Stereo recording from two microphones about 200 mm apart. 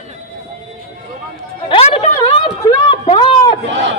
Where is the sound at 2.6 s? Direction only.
20° left (ahead or behind).